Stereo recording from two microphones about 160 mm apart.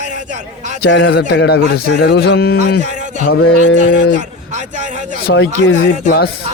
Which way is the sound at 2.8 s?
45° right (ahead or behind).